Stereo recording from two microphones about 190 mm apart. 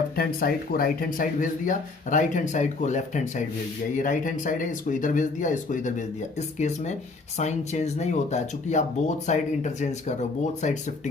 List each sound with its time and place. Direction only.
0.2 s speech: 50° left (ahead or behind)
7.3 s speech: 35° left (ahead or behind)